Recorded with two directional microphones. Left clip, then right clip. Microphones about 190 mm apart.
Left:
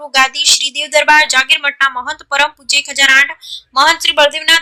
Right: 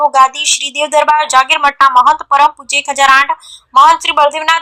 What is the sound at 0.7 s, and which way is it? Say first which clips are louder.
A woman's voice: right 1 dB; 15° left (ahead or behind).